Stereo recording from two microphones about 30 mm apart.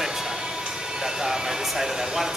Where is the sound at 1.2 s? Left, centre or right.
Centre.